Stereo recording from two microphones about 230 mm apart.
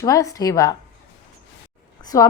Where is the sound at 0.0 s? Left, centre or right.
Centre.